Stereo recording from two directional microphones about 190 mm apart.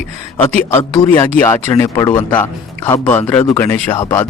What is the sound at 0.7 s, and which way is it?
Speech, 20° left (ahead or behind).